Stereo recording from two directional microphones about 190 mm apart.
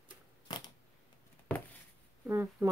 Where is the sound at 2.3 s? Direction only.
15° right (ahead or behind).